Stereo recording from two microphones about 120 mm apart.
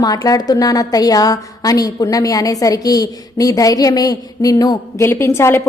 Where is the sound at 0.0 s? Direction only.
30° left (ahead or behind).